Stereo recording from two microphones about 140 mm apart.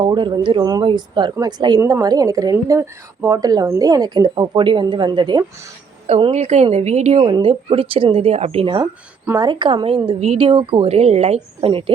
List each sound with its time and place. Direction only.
0.0 s a woman's voice: 35° right (ahead or behind)
6.1 s a woman's voice: 45° right (ahead or behind)